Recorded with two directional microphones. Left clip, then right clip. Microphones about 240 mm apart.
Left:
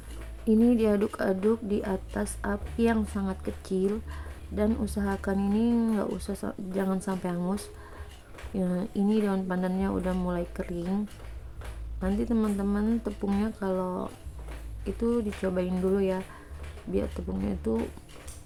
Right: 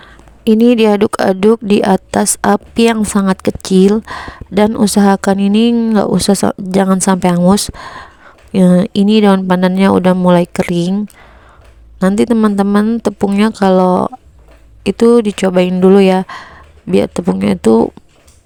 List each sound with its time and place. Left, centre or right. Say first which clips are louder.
0.4 s speech: right 15 dB; right
11.9 s speech: right 18 dB; right